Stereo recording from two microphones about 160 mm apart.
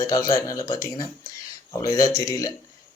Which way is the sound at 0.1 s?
20° left (ahead or behind).